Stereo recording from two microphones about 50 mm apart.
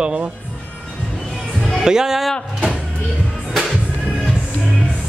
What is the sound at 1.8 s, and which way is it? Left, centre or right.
Speech, centre.